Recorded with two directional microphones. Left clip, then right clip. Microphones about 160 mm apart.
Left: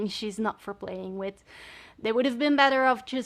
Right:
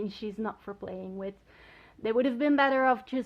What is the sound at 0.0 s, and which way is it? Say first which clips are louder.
Speech: left 5 dB; 35° left (ahead or behind).